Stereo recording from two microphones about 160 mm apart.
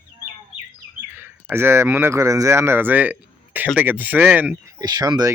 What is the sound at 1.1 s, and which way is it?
Speech, 15° right (ahead or behind).